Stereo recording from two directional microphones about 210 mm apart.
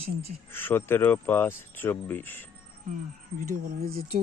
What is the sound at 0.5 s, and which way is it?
Speech, 10° left (ahead or behind).